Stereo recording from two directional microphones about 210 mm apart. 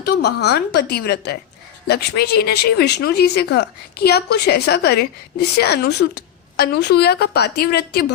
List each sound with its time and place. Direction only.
0.0 s speech: 50° left (ahead or behind)